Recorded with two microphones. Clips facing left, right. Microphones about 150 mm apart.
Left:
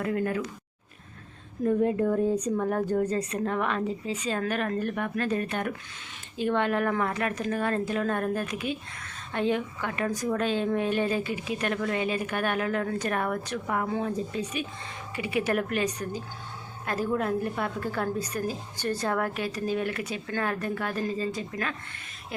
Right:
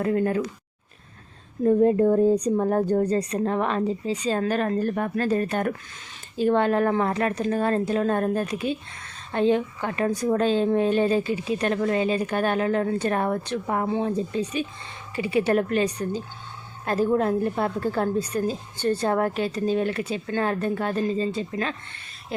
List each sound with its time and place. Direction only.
0.0 s a woman's voice: 30° right (ahead or behind)
1.6 s a woman's voice: 35° right (ahead or behind)